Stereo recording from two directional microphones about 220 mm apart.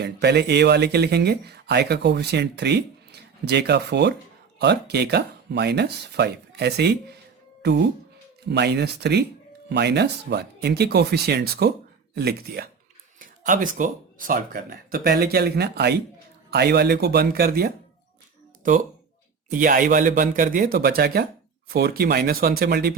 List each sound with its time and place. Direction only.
0.0 s speech: 50° right (ahead or behind)
19.5 s speech: 40° right (ahead or behind)